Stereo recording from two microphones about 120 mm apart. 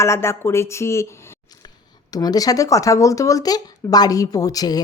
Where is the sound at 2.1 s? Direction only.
30° left (ahead or behind).